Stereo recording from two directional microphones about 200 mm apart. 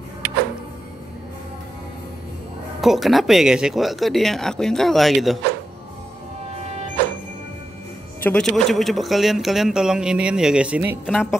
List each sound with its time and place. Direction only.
2.8 s speech: centre (ahead or behind)
6.5 s music: 35° right (ahead or behind)
8.2 s speech: 5° left (ahead or behind)